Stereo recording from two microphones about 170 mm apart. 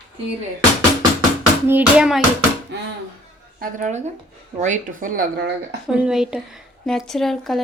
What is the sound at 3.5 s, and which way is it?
A woman's voice, 45° right (ahead or behind).